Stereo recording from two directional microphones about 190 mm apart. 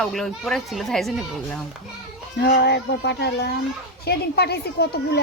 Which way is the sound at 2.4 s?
60° left (ahead or behind).